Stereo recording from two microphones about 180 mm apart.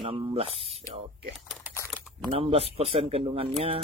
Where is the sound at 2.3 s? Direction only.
30° right (ahead or behind).